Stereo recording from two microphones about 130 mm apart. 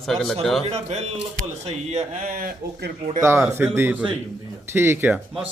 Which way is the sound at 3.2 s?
20° right (ahead or behind).